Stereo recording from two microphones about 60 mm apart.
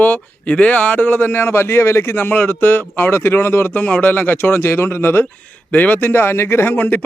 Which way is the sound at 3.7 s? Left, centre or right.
Left.